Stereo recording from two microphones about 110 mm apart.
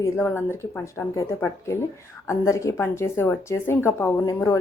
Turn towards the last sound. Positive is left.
turn(degrees=30)  # may be behind; listen again after turning